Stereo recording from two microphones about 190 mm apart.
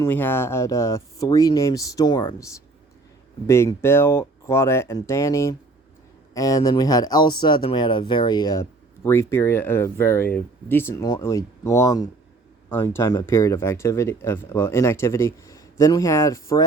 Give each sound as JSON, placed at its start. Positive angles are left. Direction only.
{"t": 0.0, "sound": "speech", "side_deg": 10}